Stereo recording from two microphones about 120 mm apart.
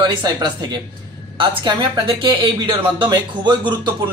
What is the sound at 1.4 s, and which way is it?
Speech, 45° right (ahead or behind).